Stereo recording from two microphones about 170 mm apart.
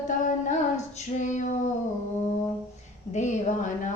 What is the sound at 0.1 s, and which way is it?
Female singing, 45° left (ahead or behind).